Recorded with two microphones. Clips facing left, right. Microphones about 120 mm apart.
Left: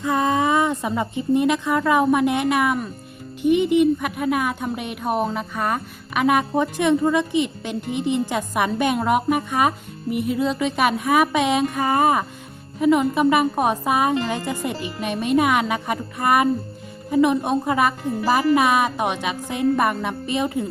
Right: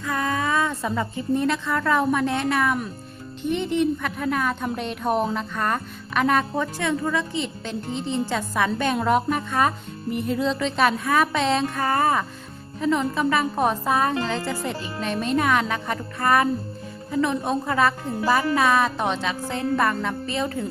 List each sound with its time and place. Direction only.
0.0 s speech: 20° left (ahead or behind)